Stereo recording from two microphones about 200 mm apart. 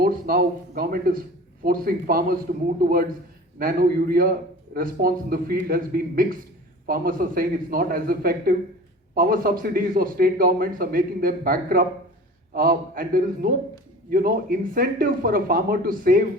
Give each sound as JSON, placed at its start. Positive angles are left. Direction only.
{"t": 0.0, "sound": "a man's voice", "side_deg": -50}
{"t": 3.6, "sound": "a man's voice", "side_deg": -45}